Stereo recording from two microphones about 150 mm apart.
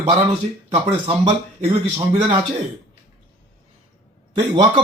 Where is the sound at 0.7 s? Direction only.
40° right (ahead or behind).